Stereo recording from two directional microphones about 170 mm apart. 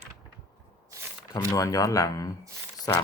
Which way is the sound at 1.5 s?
20° left (ahead or behind).